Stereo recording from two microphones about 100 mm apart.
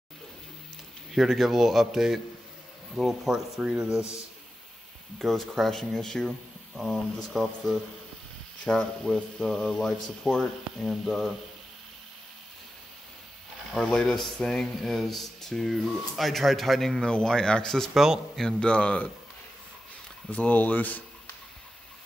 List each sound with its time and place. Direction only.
1.1 s speech: centre (ahead or behind)
5.2 s speech: centre (ahead or behind)
13.7 s speech: 5° left (ahead or behind)
18.4 s speech: 10° left (ahead or behind)
20.2 s speech: 15° left (ahead or behind)